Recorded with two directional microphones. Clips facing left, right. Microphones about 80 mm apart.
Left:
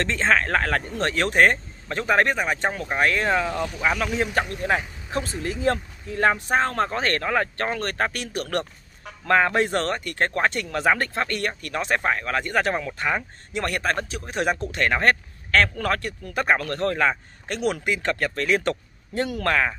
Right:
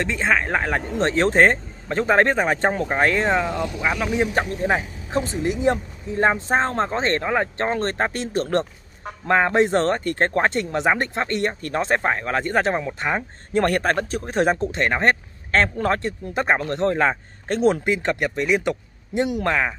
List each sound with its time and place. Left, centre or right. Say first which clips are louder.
0.0 s speech: even; centre
3.5 s speech: right 1 dB; centre; by 13.2 s right
13.5 s a man's voice: right 6 dB; right; by 19.7 s centre